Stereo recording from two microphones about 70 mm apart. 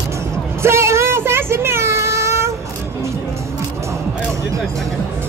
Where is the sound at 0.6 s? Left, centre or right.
Right.